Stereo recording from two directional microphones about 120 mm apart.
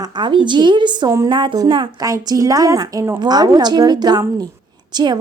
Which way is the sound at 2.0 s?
30° right (ahead or behind).